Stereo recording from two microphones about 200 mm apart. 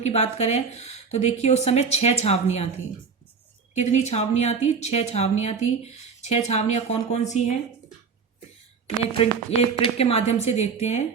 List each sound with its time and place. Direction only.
0.0 s a woman's voice: 35° left (ahead or behind)
3.8 s a woman's voice: 35° left (ahead or behind)
9.1 s a woman's voice: 30° left (ahead or behind)